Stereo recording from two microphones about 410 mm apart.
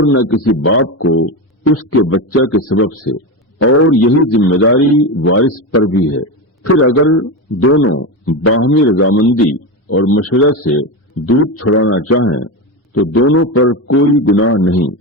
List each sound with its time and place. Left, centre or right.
0.0 s a man's voice: left